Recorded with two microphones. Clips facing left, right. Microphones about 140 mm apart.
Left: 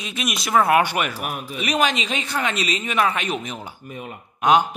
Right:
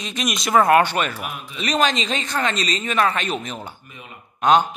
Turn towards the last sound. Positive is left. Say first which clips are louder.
# right 1 dB
turn(degrees=10)  # may be behind; listen again after turning